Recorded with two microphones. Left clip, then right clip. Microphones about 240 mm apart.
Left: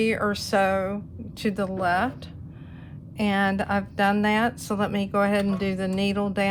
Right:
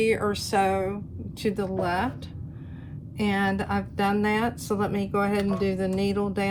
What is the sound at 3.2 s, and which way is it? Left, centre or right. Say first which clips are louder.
Speech: left 2 dB; left.